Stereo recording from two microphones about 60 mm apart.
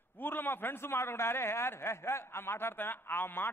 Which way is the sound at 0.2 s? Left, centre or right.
Left.